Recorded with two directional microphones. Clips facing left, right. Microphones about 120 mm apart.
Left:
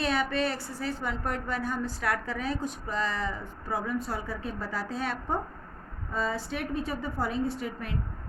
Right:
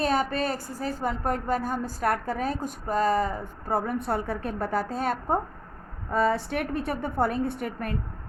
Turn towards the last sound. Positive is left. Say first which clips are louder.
# right 3 dB
turn(degrees=-55)  # may be behind; listen again after turning